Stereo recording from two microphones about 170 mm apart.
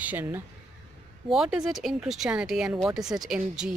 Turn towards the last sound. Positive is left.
turn(degrees=-5)  # may be behind; listen again after turning